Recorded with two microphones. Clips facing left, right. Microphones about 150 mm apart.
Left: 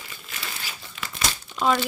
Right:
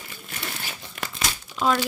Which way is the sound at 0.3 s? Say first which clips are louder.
Right 2 dB; 45° right (ahead or behind).